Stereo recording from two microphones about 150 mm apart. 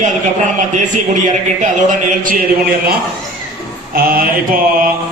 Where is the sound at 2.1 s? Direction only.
70° right (ahead or behind).